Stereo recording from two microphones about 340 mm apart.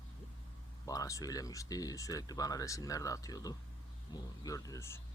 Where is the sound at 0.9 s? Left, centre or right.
Centre.